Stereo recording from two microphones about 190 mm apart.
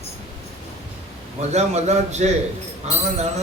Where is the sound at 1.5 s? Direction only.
35° right (ahead or behind).